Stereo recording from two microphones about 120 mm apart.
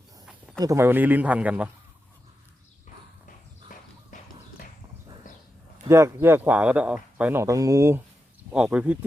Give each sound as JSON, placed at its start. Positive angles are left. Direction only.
{"t": 0.6, "sound": "speech", "side_deg": -25}
{"t": 5.9, "sound": "speech", "side_deg": -20}
{"t": 7.4, "sound": "speech", "side_deg": -25}
{"t": 8.5, "sound": "speech", "side_deg": -10}